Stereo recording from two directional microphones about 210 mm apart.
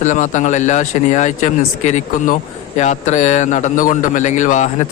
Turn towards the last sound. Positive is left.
turn(degrees=35)  # may be behind; listen again after turning